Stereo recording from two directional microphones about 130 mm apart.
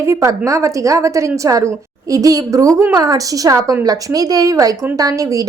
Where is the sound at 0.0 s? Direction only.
20° right (ahead or behind).